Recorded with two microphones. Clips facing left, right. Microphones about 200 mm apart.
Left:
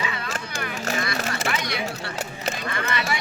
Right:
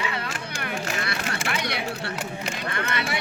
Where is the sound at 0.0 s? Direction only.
60° right (ahead or behind).